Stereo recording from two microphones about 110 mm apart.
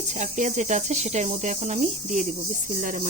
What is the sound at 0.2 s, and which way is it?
Speech, 90° right.